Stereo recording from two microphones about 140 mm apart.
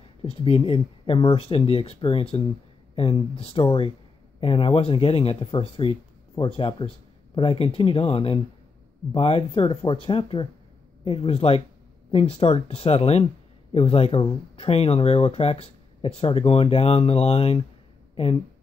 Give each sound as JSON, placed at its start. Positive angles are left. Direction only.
{"t": 0.2, "sound": "speech", "side_deg": 40}